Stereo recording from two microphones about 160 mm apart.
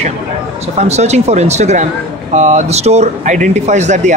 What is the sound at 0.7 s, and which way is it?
Speech, 45° right (ahead or behind).